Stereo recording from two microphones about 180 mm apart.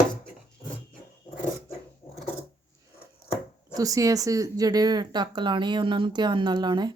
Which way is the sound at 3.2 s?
20° right (ahead or behind).